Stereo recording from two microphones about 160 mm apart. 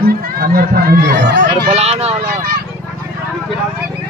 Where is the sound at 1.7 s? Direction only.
40° right (ahead or behind).